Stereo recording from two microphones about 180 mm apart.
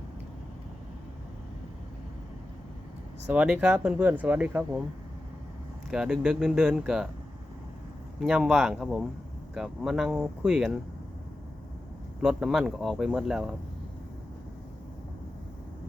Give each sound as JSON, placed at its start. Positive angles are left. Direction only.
{"t": 3.2, "sound": "speech", "side_deg": -5}
{"t": 5.9, "sound": "speech", "side_deg": -5}
{"t": 8.2, "sound": "speech", "side_deg": -5}
{"t": 12.2, "sound": "speech", "side_deg": -5}